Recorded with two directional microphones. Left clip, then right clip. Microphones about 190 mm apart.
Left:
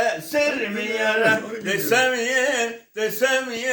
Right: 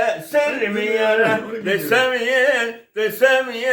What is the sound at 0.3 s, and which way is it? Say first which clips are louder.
Speech: right 5 dB; 10° right (ahead or behind).